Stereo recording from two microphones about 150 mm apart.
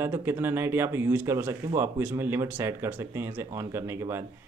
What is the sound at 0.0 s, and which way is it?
Speech, 15° right (ahead or behind).